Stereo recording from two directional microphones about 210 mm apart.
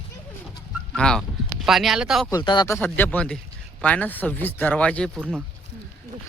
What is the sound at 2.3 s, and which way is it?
Speech, 20° left (ahead or behind).